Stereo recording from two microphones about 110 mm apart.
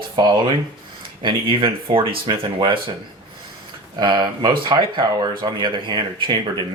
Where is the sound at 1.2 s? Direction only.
50° right (ahead or behind).